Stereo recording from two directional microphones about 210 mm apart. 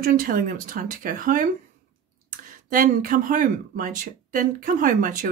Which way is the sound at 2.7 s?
40° right (ahead or behind).